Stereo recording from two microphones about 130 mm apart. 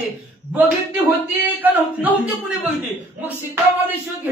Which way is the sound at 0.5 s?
15° right (ahead or behind).